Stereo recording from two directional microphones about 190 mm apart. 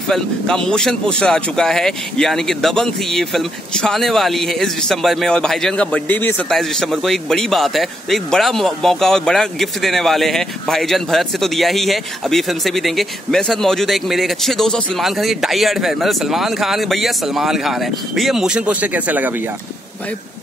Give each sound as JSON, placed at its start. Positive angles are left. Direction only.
{"t": 0.1, "sound": "speech", "side_deg": 5}